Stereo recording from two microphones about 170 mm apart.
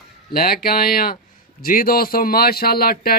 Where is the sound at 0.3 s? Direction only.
60° left (ahead or behind).